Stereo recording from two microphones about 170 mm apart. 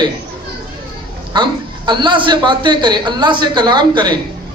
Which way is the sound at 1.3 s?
25° right (ahead or behind).